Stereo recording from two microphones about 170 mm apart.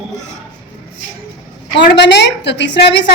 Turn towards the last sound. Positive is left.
turn(degrees=90)